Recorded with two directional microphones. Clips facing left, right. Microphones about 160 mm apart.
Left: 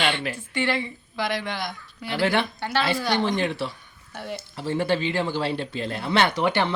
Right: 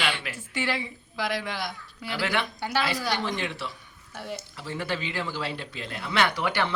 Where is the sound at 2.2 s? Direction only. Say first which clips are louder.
Left 6 dB; 30° left (ahead or behind).